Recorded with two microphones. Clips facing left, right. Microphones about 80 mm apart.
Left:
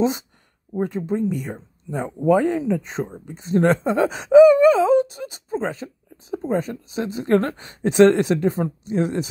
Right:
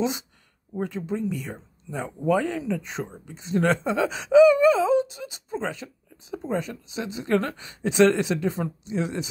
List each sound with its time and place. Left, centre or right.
0.8 s speech: left